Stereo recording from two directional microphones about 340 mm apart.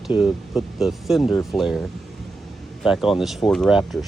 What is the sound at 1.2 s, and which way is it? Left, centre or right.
Speech, centre.